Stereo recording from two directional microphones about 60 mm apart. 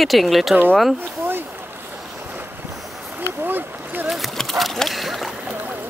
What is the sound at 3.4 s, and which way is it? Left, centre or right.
Boat, right.